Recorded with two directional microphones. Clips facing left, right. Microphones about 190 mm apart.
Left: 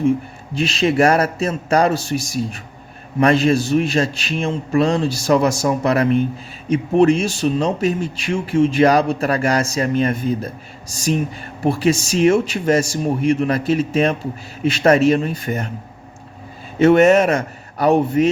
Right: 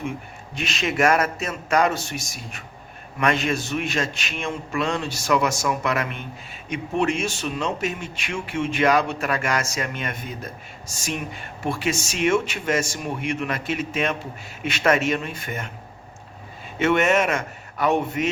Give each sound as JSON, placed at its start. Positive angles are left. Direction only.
{"t": 0.5, "sound": "speech", "side_deg": 30}
{"t": 16.7, "sound": "a man's voice", "side_deg": 35}